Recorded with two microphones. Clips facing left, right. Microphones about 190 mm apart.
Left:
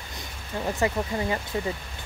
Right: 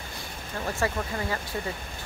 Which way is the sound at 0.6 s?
20° left (ahead or behind).